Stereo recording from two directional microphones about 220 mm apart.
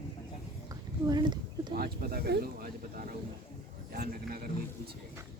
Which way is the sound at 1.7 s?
45° right (ahead or behind).